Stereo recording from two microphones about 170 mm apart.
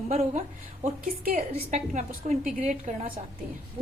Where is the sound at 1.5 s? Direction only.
45° right (ahead or behind).